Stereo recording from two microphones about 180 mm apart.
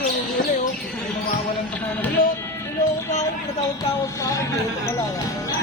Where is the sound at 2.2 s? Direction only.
50° left (ahead or behind).